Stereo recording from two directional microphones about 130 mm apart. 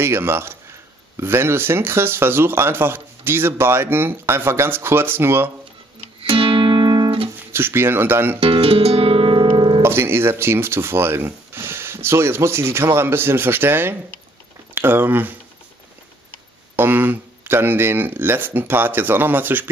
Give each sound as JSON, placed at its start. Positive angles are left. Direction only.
{"t": 0.0, "sound": "speech", "side_deg": -20}
{"t": 6.2, "sound": "music", "side_deg": -45}
{"t": 7.3, "sound": "speech", "side_deg": -15}
{"t": 8.4, "sound": "guitar", "side_deg": -45}
{"t": 9.8, "sound": "speech", "side_deg": -20}
{"t": 16.7, "sound": "speech", "side_deg": -15}